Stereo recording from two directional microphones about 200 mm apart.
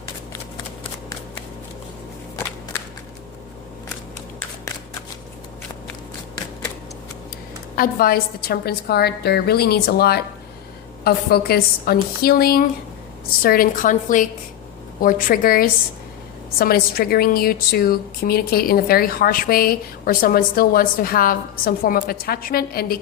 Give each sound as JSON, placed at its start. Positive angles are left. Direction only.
{"t": 7.8, "sound": "a woman's voice", "side_deg": 45}